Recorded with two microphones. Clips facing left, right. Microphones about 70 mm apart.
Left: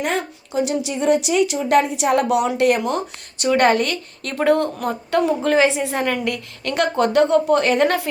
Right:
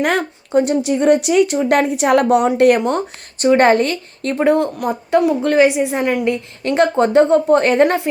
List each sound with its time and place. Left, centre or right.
0.0 s a woman's voice: right
3.4 s a woman's voice: right
4.4 s a woman's voice: centre
5.6 s speech: centre
6.2 s a woman's voice: right